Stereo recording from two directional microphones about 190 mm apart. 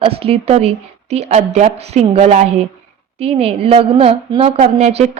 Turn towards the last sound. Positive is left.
turn(degrees=-35)  # may be behind; listen again after turning